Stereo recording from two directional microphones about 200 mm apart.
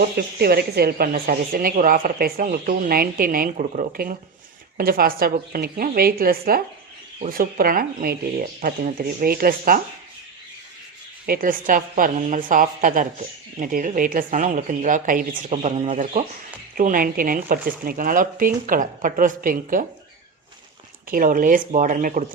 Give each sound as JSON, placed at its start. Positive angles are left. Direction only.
{"t": 0.2, "sound": "a woman's voice", "side_deg": -55}
{"t": 11.3, "sound": "a woman's voice", "side_deg": -45}
{"t": 15.5, "sound": "speech", "side_deg": -30}
{"t": 16.7, "sound": "a woman's voice", "side_deg": -45}
{"t": 21.1, "sound": "speech", "side_deg": -45}